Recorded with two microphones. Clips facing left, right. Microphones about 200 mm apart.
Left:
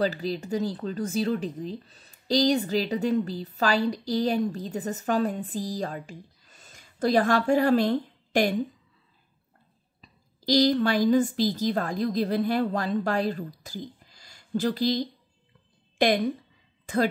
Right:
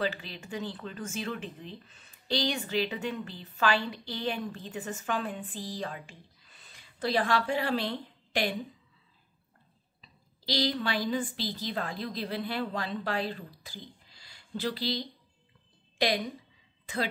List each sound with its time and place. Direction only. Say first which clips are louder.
0.0 s speech: left 7 dB; 40° left (ahead or behind)
10.0 s a woman's voice: left 9 dB; 45° left (ahead or behind)
16.8 s speech: left 8 dB; 45° left (ahead or behind)